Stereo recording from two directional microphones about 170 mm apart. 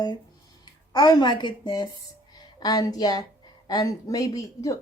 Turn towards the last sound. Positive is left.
turn(degrees=20)  # may be behind; listen again after turning